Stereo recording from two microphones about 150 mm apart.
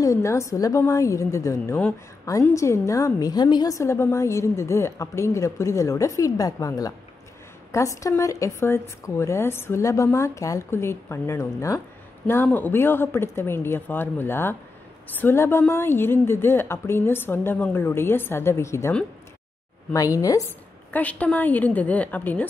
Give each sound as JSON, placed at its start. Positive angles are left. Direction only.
{"t": 0.0, "sound": "a woman's voice", "side_deg": 20}
{"t": 20.9, "sound": "a woman's voice", "side_deg": 10}